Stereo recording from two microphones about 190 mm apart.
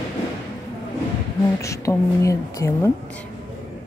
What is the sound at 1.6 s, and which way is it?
Speech, 15° left (ahead or behind).